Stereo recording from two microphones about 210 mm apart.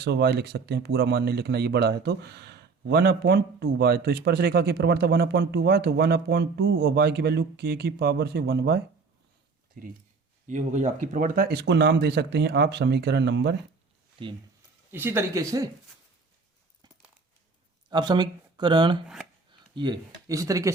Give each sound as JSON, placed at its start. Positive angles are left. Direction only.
{"t": 0.0, "sound": "speech", "side_deg": -50}
{"t": 14.2, "sound": "speech", "side_deg": -25}
{"t": 14.9, "sound": "speech", "side_deg": -10}
{"t": 17.8, "sound": "speech", "side_deg": -20}
{"t": 19.0, "sound": "speech", "side_deg": 0}
{"t": 19.7, "sound": "speech", "side_deg": -20}